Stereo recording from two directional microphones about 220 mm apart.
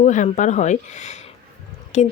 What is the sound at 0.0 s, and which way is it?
A woman's voice, 35° left (ahead or behind).